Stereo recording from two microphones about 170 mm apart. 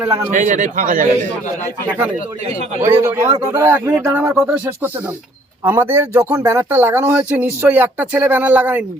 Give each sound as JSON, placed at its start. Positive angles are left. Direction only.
{"t": 0.0, "sound": "speech", "side_deg": -15}
{"t": 0.3, "sound": "speech", "side_deg": -50}
{"t": 2.8, "sound": "speech", "side_deg": -15}